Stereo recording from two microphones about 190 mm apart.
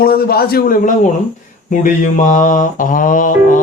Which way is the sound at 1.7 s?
40° left (ahead or behind).